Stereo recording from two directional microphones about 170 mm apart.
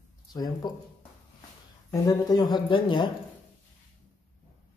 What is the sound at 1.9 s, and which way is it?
Speech, 20° left (ahead or behind).